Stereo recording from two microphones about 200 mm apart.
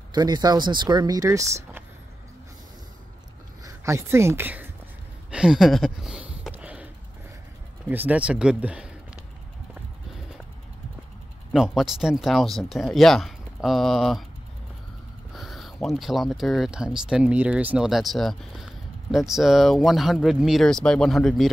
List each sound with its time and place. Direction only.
0.1 s speech: 20° right (ahead or behind)
3.6 s speech: 15° right (ahead or behind)
5.3 s a sound: 5° right (ahead or behind)
7.9 s speech: 10° right (ahead or behind)
11.5 s speech: centre (ahead or behind)
15.3 s speech: centre (ahead or behind)